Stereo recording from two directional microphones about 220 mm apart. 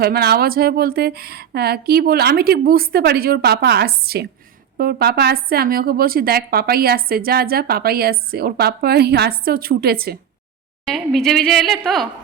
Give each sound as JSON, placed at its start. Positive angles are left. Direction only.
{"t": 0.0, "sound": "a woman's voice", "side_deg": -45}
{"t": 10.8, "sound": "speech", "side_deg": 0}